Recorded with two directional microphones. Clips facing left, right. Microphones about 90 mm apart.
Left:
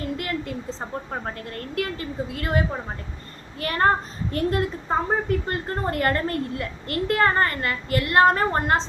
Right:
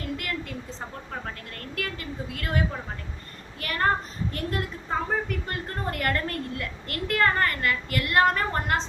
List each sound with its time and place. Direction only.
0.2 s a woman's voice: 25° left (ahead or behind)